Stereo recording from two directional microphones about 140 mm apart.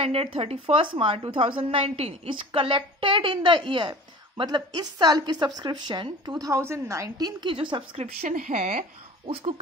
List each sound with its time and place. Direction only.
0.0 s a woman's voice: 45° right (ahead or behind)
8.0 s speech: 55° right (ahead or behind)